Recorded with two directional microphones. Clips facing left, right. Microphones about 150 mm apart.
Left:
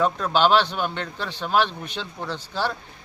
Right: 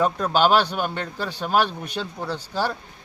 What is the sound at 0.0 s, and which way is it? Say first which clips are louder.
A man's voice: right 1 dB; 10° right (ahead or behind).